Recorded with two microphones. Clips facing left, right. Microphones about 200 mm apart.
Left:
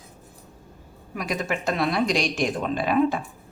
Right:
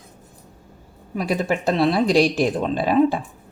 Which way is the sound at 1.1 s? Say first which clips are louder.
Right 5 dB; 30° right (ahead or behind).